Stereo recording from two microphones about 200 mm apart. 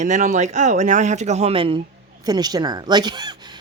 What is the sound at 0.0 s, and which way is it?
A woman's voice, 40° right (ahead or behind).